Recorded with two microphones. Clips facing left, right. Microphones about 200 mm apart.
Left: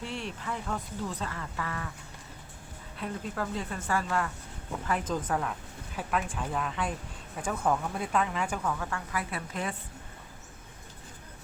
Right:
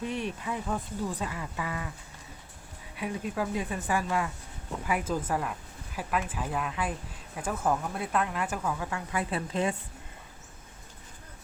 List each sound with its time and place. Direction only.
0.0 s speech: 15° right (ahead or behind)
2.9 s speech: 10° right (ahead or behind)
8.9 s a woman's voice: 20° right (ahead or behind)